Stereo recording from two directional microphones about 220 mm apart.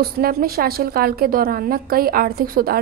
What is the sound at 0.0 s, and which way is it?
A woman's voice, 45° right (ahead or behind).